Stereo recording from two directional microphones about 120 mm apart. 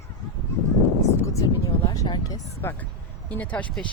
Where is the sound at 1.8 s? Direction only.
40° left (ahead or behind).